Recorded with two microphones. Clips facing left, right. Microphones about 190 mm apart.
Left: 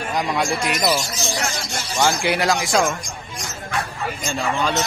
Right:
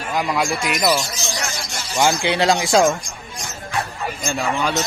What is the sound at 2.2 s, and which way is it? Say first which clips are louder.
Speech: right 2 dB; 25° right (ahead or behind).